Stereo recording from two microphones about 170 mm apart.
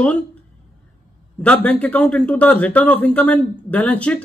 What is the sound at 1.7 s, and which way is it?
Speech, 10° left (ahead or behind).